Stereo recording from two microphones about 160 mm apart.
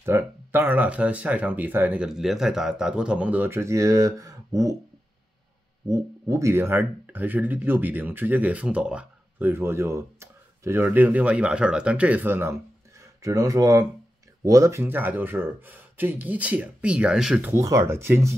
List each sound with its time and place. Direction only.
0.0 s speech: 15° right (ahead or behind)
5.9 s speech: 20° right (ahead or behind)